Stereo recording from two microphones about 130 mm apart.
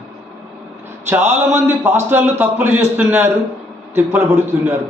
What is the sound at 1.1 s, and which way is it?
A man's voice, 15° right (ahead or behind).